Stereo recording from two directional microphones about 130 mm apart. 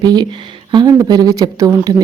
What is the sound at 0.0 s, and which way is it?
Speech, 35° right (ahead or behind).